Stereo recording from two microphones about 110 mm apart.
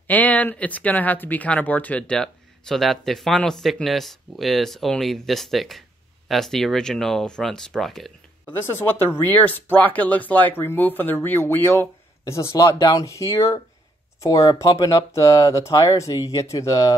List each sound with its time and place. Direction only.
0.0 s speech: 15° left (ahead or behind)
8.5 s speech: 20° left (ahead or behind)